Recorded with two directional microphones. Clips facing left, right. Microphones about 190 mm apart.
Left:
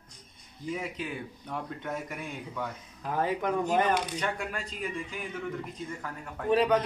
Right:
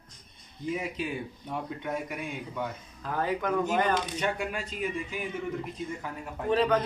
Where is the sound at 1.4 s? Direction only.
5° right (ahead or behind).